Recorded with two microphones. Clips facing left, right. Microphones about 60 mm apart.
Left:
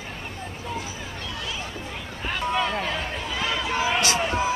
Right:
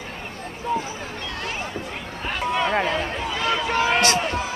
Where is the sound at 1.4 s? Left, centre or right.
Right.